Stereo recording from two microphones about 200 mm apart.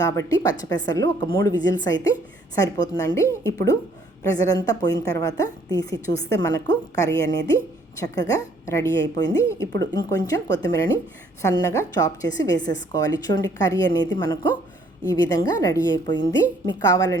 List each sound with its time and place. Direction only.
0.0 s a woman's voice: 15° left (ahead or behind)
15.1 s a woman's voice: 20° left (ahead or behind)